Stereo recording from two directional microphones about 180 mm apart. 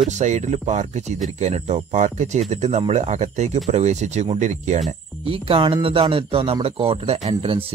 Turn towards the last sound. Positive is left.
turn(degrees=-30)  # may be behind; listen again after turning